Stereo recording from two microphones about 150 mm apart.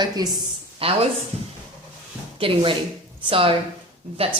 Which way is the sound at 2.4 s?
35° right (ahead or behind).